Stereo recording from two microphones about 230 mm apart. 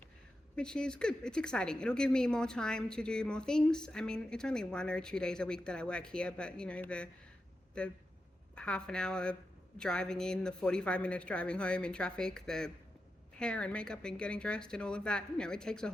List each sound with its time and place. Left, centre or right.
0.5 s a woman's voice: centre